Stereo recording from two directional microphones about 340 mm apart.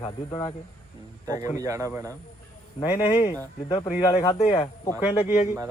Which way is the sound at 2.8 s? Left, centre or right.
Centre.